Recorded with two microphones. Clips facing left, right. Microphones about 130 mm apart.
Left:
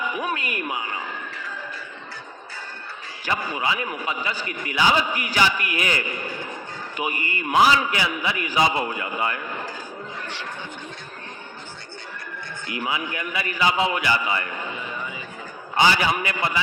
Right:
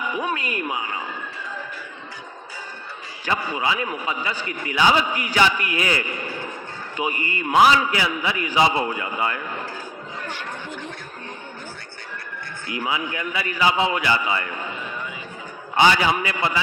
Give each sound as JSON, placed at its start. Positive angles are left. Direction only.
{"t": 0.2, "sound": "a man's voice", "side_deg": -25}
{"t": 3.2, "sound": "a man's voice", "side_deg": -25}
{"t": 12.8, "sound": "a man's voice", "side_deg": -25}
{"t": 15.7, "sound": "a man's voice", "side_deg": -25}